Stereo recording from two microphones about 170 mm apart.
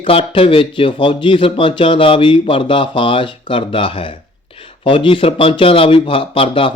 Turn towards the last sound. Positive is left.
turn(degrees=30)  # may be behind; listen again after turning